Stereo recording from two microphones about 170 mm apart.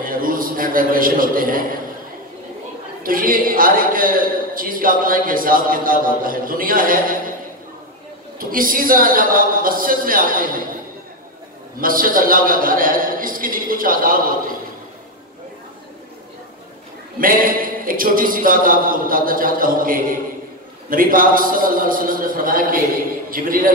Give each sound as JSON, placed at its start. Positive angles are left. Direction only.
{"t": 0.0, "sound": "a man's voice", "side_deg": -55}
{"t": 3.0, "sound": "a man's voice", "side_deg": -55}
{"t": 8.4, "sound": "a man's voice", "side_deg": -55}
{"t": 11.8, "sound": "a man's voice", "side_deg": -55}
{"t": 17.2, "sound": "a man's voice", "side_deg": -55}